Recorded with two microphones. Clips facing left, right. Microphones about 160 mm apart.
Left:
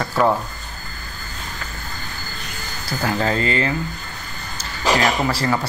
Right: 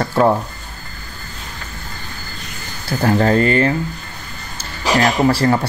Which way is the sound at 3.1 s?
45° right (ahead or behind).